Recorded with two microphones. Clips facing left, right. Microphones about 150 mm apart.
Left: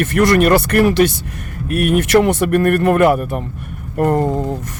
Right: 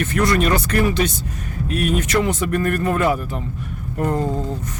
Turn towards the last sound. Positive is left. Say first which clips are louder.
# left 5 dB
turn(degrees=65)  # may be behind; listen again after turning